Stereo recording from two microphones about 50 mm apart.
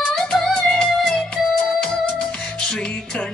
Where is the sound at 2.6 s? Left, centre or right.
Centre.